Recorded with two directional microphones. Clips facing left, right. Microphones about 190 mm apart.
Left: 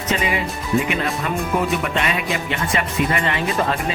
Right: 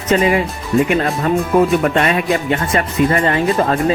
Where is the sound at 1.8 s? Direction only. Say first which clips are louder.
Right 7 dB; 45° right (ahead or behind).